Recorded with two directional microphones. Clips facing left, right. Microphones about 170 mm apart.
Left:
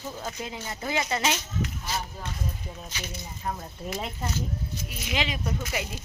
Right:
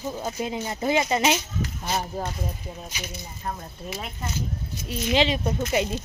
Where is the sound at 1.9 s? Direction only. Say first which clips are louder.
Right 6 dB; 45° right (ahead or behind).